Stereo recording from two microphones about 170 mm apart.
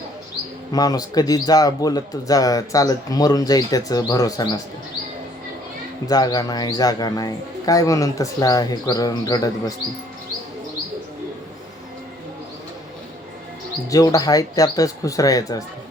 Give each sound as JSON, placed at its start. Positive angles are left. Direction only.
{"t": 0.7, "sound": "a man's voice", "side_deg": 20}
{"t": 6.1, "sound": "a man's voice", "side_deg": 20}
{"t": 13.9, "sound": "a man's voice", "side_deg": 20}